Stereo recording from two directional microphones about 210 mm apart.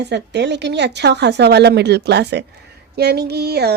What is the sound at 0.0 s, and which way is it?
Speech, 55° right (ahead or behind).